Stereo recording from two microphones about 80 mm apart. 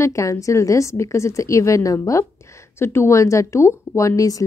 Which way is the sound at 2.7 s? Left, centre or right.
Left.